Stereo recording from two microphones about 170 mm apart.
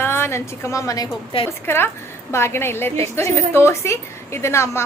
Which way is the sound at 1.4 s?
15° left (ahead or behind).